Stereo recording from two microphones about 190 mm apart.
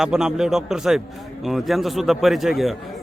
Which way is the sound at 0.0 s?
5° right (ahead or behind).